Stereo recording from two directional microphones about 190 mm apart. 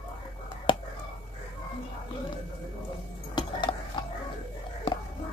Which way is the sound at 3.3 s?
25° left (ahead or behind).